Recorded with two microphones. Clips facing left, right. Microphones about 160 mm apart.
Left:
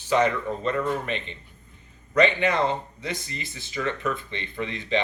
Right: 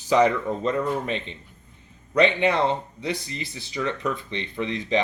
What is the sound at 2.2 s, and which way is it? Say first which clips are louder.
Speech: right 1 dB; 30° right (ahead or behind).